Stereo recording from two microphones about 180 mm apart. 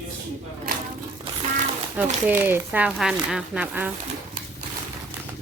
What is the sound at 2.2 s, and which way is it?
Speech, 10° right (ahead or behind).